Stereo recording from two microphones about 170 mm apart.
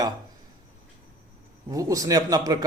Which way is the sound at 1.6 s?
20° right (ahead or behind).